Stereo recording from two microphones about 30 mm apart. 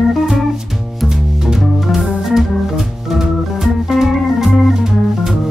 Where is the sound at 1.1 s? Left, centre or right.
Centre.